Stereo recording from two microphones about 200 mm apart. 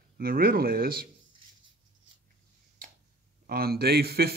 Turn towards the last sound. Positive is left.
turn(degrees=-50)  # may be behind; listen again after turning